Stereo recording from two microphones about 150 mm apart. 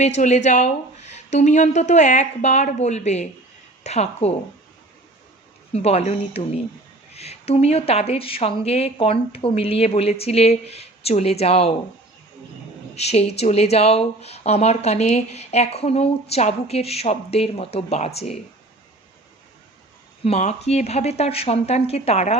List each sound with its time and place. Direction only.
0.0 s speech: 50° left (ahead or behind)
5.7 s speech: 45° left (ahead or behind)
13.0 s speech: 45° left (ahead or behind)
20.2 s speech: 45° left (ahead or behind)